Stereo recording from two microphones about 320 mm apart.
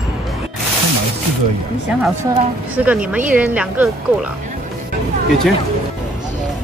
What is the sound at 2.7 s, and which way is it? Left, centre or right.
A woman's voice, centre.